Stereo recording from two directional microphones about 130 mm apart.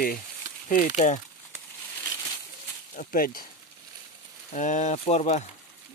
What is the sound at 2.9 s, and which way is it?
Speech, 85° left.